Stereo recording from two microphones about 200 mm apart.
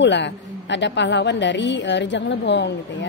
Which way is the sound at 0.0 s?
60° left (ahead or behind).